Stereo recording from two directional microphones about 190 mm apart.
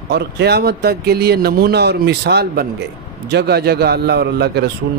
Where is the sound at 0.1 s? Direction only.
60° right (ahead or behind).